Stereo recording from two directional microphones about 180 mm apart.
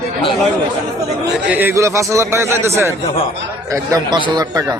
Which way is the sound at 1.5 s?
10° right (ahead or behind).